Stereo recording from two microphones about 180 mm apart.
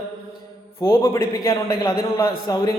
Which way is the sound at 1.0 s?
20° left (ahead or behind).